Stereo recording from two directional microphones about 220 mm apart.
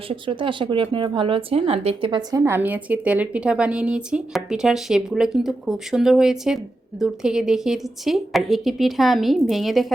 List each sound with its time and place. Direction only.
0.1 s speech: 25° right (ahead or behind)
2.4 s a woman's voice: 10° right (ahead or behind)